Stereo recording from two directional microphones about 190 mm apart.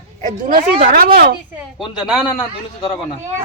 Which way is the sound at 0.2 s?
45° right (ahead or behind).